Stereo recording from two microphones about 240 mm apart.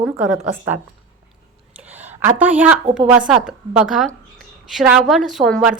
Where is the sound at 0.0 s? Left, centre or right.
Centre.